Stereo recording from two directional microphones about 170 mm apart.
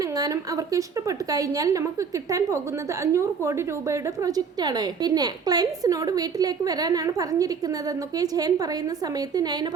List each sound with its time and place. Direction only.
0.2 s a woman's voice: 20° right (ahead or behind)